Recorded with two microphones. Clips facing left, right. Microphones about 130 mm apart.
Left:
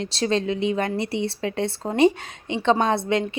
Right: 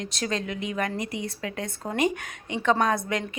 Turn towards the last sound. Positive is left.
turn(degrees=30)  # may be behind; listen again after turning